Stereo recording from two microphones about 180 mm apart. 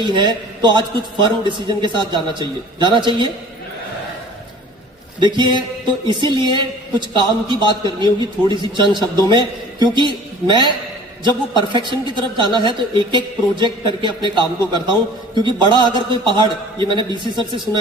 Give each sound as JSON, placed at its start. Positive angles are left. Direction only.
{"t": 0.0, "sound": "a man's voice", "side_deg": -25}
{"t": 5.2, "sound": "a man's voice", "side_deg": -25}